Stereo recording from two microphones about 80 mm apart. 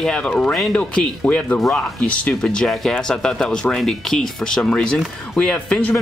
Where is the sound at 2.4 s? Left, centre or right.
Centre.